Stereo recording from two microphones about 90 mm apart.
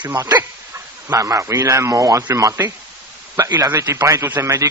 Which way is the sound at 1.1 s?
40° right (ahead or behind).